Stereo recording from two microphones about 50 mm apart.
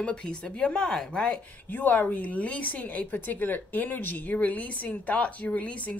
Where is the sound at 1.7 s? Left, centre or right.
Left.